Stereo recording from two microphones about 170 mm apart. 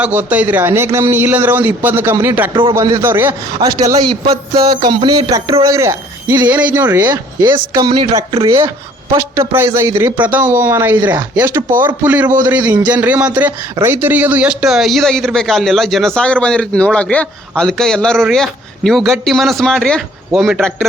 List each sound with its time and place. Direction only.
0.0 s a man's voice: 10° right (ahead or behind)
7.1 s speech: 20° right (ahead or behind)
8.4 s a man's voice: 15° right (ahead or behind); by 20.8 s 5° left (ahead or behind)